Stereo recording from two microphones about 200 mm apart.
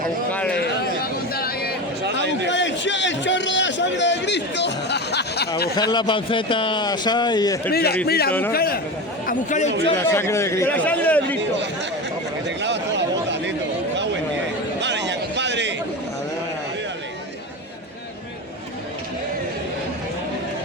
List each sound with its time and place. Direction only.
1.3 s a sound: 50° left (ahead or behind)
2.5 s a man's voice: 65° left (ahead or behind)
5.9 s a man's voice: 25° left (ahead or behind)
7.7 s a man's voice: 50° left (ahead or behind)
8.3 s speech: 10° left (ahead or behind)
8.5 s a man's voice: 50° left (ahead or behind)
10.0 s speech: 10° left (ahead or behind)
12.5 s a sound: 60° right (ahead or behind)
14.8 s a sound: 60° right (ahead or behind)